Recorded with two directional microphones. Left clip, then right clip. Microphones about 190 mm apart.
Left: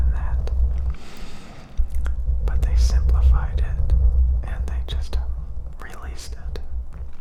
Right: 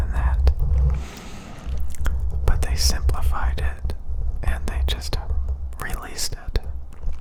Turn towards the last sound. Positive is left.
turn(degrees=-15)  # may be behind; listen again after turning